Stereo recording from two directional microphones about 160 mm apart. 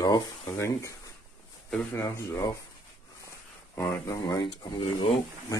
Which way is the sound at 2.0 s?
20° left (ahead or behind).